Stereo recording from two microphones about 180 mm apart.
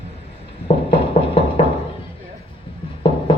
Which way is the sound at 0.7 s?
35° left (ahead or behind).